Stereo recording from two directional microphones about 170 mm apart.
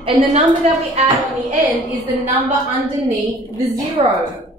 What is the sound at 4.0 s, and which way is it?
Speech, 30° right (ahead or behind).